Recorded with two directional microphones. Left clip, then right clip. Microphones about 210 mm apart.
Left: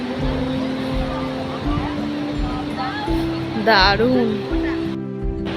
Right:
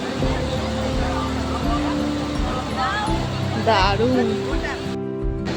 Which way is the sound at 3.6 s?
20° left (ahead or behind).